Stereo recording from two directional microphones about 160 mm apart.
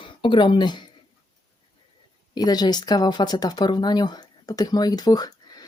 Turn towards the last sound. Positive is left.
turn(degrees=25)  # may be behind; listen again after turning